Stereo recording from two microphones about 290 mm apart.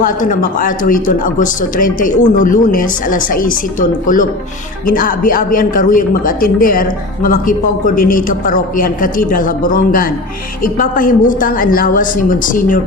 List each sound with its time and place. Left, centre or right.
0.0 s speech: left